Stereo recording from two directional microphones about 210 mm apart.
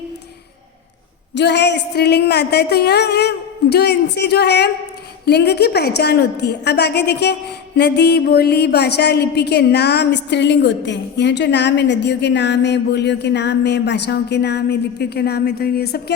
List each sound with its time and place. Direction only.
1.4 s a woman's voice: 55° left (ahead or behind)